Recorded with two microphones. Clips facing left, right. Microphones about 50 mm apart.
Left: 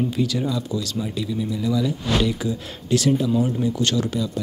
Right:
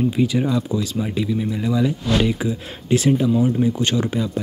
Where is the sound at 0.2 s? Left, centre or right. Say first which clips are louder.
Right 5 dB; right.